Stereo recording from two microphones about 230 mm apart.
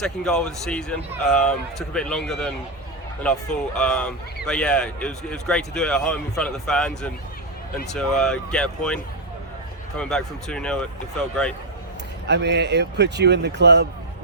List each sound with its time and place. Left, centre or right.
0.0 s speech: centre
10.0 s speech: centre
12.3 s speech: right